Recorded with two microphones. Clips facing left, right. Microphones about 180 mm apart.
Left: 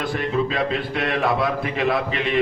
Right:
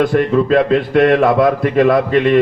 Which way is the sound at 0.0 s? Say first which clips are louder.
Right 10 dB; 50° right (ahead or behind).